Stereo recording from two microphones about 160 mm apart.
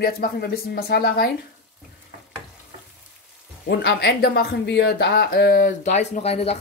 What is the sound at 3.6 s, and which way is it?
Speech, 90° left.